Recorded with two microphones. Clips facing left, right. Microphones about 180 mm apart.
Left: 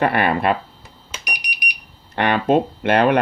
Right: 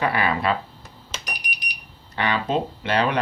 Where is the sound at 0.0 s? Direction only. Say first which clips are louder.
Left 5 dB; 60° left (ahead or behind).